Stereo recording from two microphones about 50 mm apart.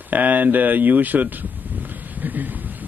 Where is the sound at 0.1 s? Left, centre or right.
Right.